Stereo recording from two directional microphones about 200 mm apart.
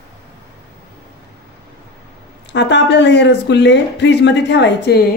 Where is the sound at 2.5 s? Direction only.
60° left (ahead or behind).